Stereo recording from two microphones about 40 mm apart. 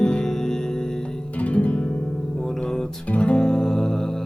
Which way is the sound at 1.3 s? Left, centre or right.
Left.